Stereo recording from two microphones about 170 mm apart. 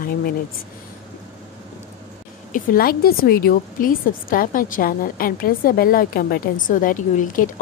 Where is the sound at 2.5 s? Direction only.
60° left (ahead or behind).